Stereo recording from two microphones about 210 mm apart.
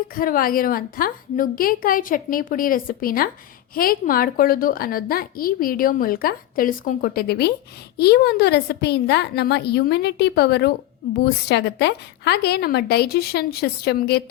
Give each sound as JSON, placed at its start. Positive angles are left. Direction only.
{"t": 0.2, "sound": "a woman's voice", "side_deg": 45}